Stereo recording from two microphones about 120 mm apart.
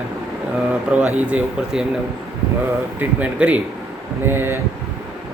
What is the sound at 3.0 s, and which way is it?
Speech, 10° right (ahead or behind).